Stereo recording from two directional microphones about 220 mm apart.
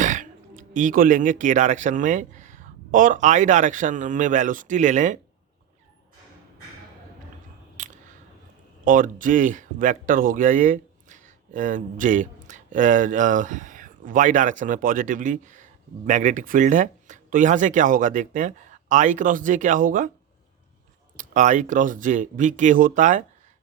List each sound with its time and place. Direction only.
0.0 s speech: 35° right (ahead or behind)
7.8 s a sound: 35° right (ahead or behind)
8.8 s speech: 35° right (ahead or behind)
21.2 s speech: 35° right (ahead or behind)